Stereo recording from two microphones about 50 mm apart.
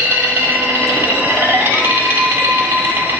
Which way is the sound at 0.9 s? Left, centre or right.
Right.